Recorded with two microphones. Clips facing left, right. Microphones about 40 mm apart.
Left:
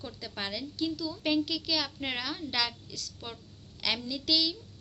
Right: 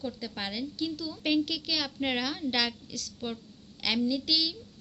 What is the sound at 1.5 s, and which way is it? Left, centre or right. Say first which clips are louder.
Speech: even; right.